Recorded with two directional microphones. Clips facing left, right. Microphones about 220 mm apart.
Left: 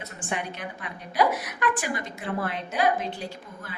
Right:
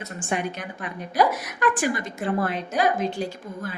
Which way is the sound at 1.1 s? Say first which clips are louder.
Right 2 dB; 45° right (ahead or behind).